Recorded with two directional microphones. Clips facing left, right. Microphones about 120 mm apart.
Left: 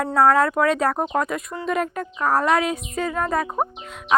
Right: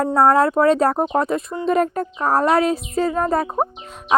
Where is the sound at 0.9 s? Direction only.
25° right (ahead or behind).